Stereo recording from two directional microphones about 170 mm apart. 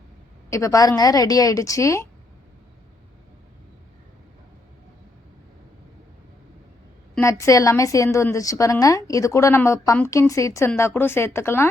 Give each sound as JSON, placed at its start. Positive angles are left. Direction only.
{"t": 0.5, "sound": "a woman's voice", "side_deg": 20}
{"t": 7.2, "sound": "a woman's voice", "side_deg": 15}